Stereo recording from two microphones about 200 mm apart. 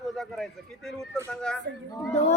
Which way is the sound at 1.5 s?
5° left (ahead or behind).